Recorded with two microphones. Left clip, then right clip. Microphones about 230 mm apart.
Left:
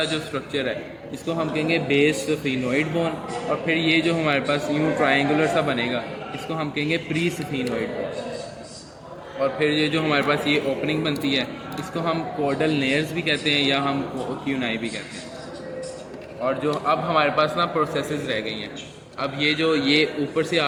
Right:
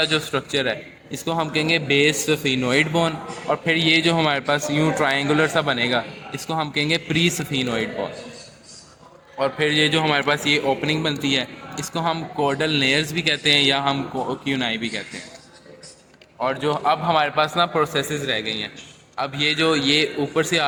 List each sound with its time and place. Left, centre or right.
0.0 s a man's voice: right
9.4 s a man's voice: right
16.4 s a man's voice: right